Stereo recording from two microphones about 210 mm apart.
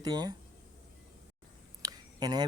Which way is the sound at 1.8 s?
20° right (ahead or behind).